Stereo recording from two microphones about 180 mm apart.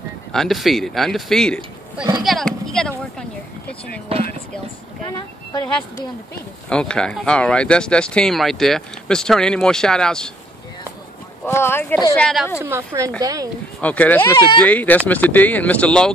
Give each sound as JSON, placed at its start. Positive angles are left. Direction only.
{"t": 0.3, "sound": "speech", "side_deg": 0}
{"t": 2.2, "sound": "a sound", "side_deg": 0}
{"t": 5.0, "sound": "speech", "side_deg": 20}
{"t": 6.7, "sound": "speech", "side_deg": 5}
{"t": 11.4, "sound": "speech", "side_deg": 15}
{"t": 12.6, "sound": "a woman's voice", "side_deg": -15}
{"t": 13.7, "sound": "speech", "side_deg": 10}